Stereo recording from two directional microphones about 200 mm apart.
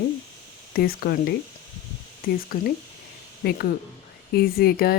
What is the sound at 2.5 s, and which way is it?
A woman's voice, 45° left (ahead or behind).